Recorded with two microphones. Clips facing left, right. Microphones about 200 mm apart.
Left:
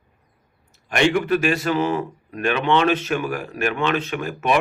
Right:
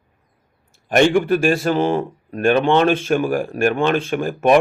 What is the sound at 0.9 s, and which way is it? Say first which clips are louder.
Speech: right 4 dB; 45° right (ahead or behind).